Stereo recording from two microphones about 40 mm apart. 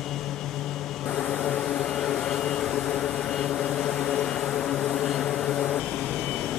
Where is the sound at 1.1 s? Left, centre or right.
Left.